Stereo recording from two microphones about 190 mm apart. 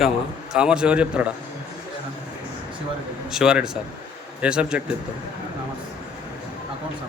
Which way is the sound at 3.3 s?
5° right (ahead or behind).